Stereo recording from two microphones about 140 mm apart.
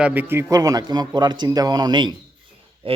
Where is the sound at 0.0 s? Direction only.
10° right (ahead or behind).